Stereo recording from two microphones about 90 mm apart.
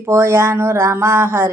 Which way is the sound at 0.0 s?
25° right (ahead or behind).